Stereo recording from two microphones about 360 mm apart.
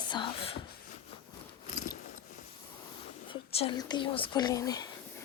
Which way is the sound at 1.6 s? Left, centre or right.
Centre.